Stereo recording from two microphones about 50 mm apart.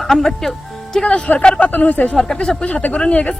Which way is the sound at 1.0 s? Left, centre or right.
Left.